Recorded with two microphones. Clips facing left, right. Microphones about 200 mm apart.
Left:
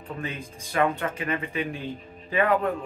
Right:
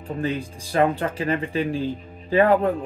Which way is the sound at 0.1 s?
35° right (ahead or behind).